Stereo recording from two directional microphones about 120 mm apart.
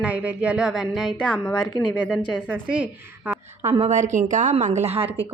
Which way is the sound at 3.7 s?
75° right (ahead or behind).